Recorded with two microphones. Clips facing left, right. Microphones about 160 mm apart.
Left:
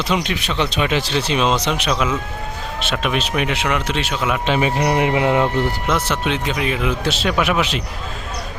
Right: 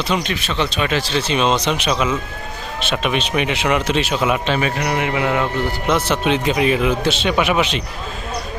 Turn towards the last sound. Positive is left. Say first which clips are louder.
# right 1 dB
turn(degrees=0)  # may be behind; listen again after turning